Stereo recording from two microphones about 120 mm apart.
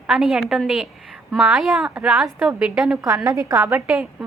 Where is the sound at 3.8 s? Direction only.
5° right (ahead or behind).